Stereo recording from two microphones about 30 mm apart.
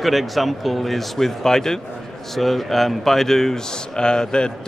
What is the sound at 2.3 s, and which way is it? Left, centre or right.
Speech, centre.